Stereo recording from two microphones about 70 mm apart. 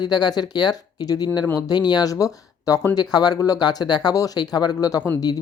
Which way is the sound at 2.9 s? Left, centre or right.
Left.